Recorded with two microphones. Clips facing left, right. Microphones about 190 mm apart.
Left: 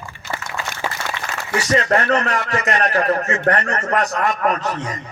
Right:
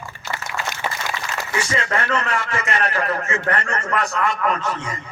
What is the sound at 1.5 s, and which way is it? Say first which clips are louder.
Speech: left 6 dB; 40° left (ahead or behind).